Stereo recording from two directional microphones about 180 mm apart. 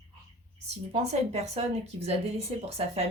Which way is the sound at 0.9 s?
35° right (ahead or behind).